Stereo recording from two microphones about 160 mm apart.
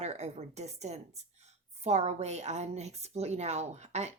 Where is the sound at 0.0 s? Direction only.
45° right (ahead or behind).